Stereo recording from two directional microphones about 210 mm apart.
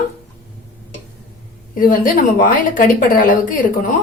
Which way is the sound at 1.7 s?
40° left (ahead or behind).